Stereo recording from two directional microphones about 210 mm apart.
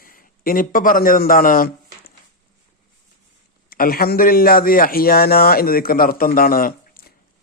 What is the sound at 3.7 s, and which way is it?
A man's voice, 45° left (ahead or behind).